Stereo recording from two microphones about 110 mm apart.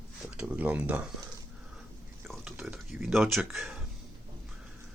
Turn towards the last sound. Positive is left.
turn(degrees=0)  # may be behind; listen again after turning